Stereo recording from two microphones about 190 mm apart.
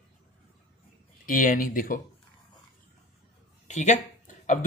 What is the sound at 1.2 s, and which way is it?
Speech, 45° left (ahead or behind).